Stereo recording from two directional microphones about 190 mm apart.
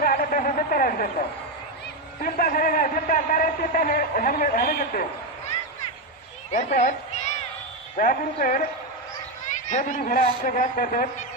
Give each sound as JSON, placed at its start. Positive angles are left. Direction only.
{"t": 0.0, "sound": "a sound", "side_deg": 50}
{"t": 2.2, "sound": "a man's voice", "side_deg": 50}
{"t": 6.5, "sound": "speech", "side_deg": 40}
{"t": 7.9, "sound": "a man's voice", "side_deg": 45}
{"t": 9.6, "sound": "a man's voice", "side_deg": 40}